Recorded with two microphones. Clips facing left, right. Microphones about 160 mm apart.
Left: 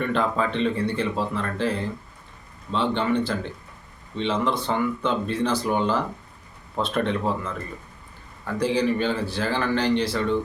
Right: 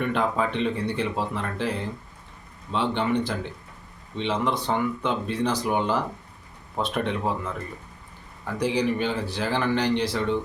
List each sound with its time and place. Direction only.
0.0 s speech: 15° right (ahead or behind)
8.5 s speech: 15° right (ahead or behind)